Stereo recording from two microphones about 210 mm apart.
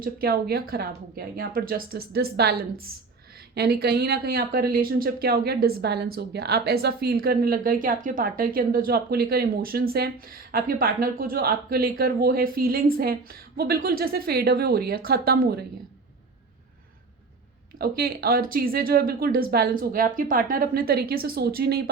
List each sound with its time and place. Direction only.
0.0 s speech: 45° right (ahead or behind)
17.7 s speech: 45° right (ahead or behind)